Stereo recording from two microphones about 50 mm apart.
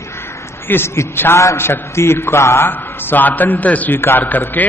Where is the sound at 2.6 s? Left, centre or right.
Left.